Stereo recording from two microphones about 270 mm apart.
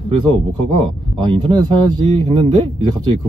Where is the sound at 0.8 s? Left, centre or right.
Centre.